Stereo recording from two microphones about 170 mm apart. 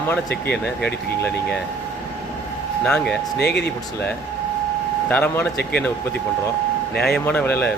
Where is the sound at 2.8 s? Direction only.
5° left (ahead or behind).